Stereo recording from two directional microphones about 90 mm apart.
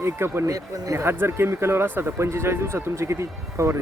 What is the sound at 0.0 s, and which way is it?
Speech, 30° right (ahead or behind).